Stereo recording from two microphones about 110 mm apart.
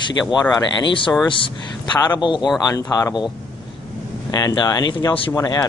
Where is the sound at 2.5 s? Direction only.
30° left (ahead or behind).